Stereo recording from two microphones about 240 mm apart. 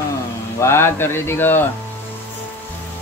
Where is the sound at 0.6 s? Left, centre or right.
Centre.